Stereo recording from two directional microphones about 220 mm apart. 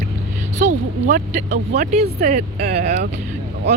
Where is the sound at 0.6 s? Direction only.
35° right (ahead or behind).